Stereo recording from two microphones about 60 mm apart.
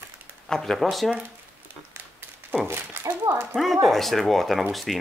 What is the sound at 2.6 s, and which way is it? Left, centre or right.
Speech, right.